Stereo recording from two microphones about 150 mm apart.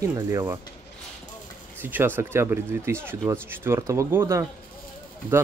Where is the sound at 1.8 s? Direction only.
15° right (ahead or behind).